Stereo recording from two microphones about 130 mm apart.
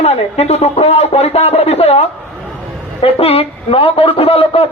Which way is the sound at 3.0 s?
50° left (ahead or behind).